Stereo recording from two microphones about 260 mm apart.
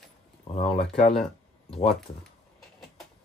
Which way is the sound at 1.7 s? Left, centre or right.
Left.